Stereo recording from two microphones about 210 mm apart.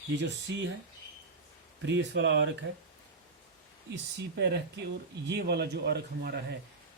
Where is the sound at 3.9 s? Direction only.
50° right (ahead or behind).